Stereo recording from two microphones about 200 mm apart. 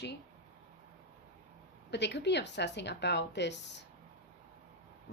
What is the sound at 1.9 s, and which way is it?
Speech, 60° left (ahead or behind).